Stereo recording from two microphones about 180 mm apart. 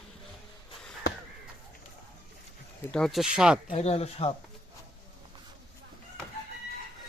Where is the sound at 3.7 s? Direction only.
35° left (ahead or behind).